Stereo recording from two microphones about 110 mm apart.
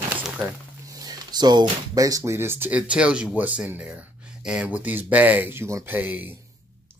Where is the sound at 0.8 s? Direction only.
35° right (ahead or behind).